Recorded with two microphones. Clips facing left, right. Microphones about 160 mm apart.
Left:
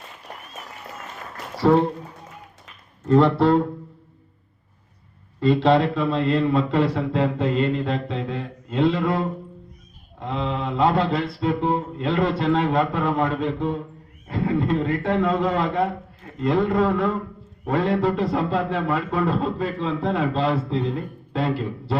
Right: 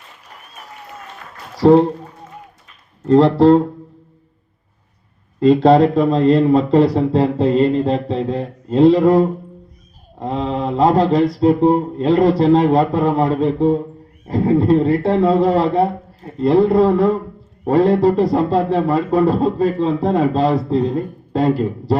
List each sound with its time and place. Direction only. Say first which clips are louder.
1.5 s speech: right 7 dB; 35° right (ahead or behind)
3.1 s speech: right 6 dB; 35° right (ahead or behind)
5.4 s speech: right 7 dB; 40° right (ahead or behind)